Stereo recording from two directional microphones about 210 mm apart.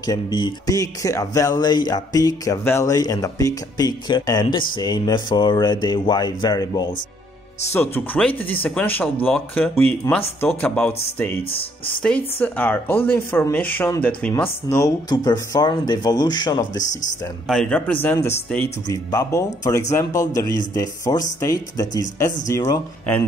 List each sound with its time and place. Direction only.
0.0 s speech: 20° left (ahead or behind)
17.5 s speech: 5° left (ahead or behind)